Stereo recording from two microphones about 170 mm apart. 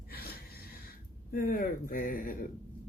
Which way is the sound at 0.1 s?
65° left (ahead or behind).